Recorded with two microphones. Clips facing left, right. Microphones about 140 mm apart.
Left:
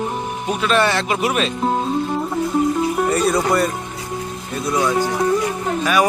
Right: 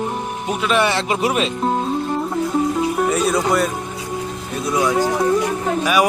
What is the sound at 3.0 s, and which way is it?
Speech, centre (ahead or behind).